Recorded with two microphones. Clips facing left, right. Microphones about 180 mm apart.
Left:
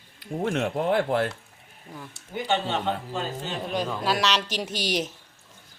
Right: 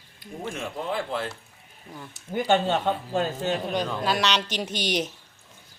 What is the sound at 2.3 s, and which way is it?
Speech, 50° right (ahead or behind).